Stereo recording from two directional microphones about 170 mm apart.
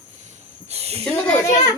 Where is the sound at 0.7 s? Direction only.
35° right (ahead or behind).